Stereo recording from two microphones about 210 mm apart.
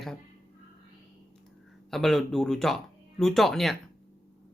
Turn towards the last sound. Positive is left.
turn(degrees=0)  # may be behind; listen again after turning